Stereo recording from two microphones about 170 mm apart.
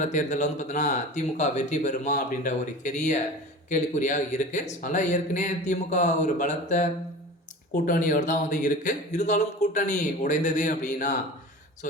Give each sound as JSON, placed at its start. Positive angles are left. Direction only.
{"t": 0.0, "sound": "speech", "side_deg": 45}